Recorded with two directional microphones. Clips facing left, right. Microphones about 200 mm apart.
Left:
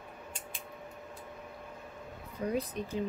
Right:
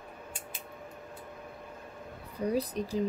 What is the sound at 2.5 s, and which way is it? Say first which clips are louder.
Speech: right 3 dB; 35° right (ahead or behind).